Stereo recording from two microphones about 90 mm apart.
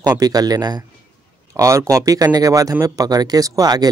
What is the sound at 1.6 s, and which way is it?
Speech, 35° right (ahead or behind).